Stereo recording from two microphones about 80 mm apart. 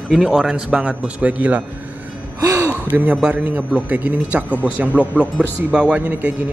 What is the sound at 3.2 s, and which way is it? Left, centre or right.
A man's voice, centre.